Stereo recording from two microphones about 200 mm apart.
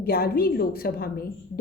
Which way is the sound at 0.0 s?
50° left (ahead or behind).